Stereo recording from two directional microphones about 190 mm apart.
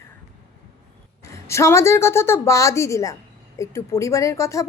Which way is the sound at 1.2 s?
15° left (ahead or behind).